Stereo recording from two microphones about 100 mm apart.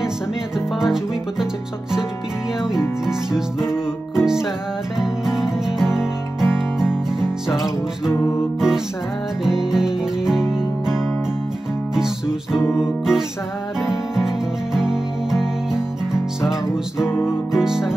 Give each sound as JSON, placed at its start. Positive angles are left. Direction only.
{"t": 1.4, "sound": "music", "side_deg": -5}
{"t": 3.1, "sound": "music", "side_deg": -5}